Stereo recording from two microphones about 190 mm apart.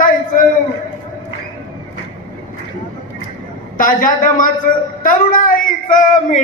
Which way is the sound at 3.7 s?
45° left (ahead or behind).